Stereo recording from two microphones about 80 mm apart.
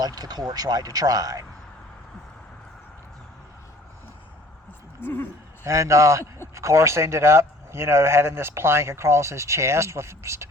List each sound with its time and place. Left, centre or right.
0.0 s speech: right
4.9 s speech: left
5.6 s speech: right